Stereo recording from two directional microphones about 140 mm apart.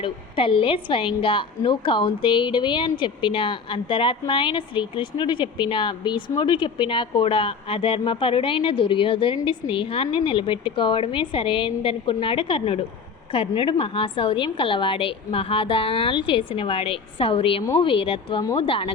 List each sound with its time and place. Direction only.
0.0 s a woman's voice: 40° left (ahead or behind)